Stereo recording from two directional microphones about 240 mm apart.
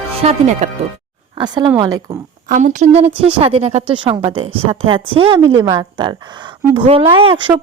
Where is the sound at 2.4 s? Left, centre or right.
Right.